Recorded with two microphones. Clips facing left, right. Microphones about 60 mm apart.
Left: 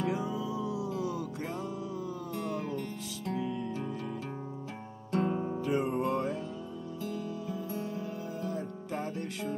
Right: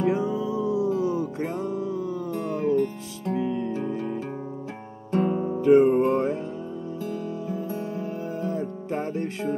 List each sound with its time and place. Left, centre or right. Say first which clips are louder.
0.0 s music: right 8 dB; right
5.1 s guitar: right 7 dB; right
5.6 s music: right 16 dB; right